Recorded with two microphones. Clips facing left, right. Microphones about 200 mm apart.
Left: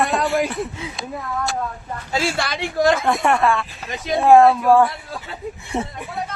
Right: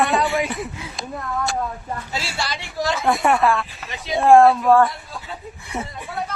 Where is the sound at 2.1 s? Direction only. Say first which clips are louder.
Left 9 dB; 50° left (ahead or behind).